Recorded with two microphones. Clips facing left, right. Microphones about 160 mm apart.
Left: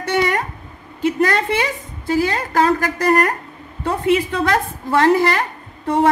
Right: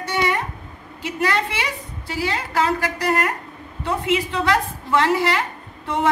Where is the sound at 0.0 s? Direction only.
50° left (ahead or behind).